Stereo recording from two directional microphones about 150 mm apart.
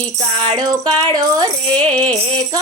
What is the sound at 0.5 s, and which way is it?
Music, 25° right (ahead or behind).